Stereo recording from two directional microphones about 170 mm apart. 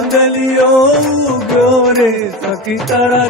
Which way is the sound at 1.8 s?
Centre (ahead or behind).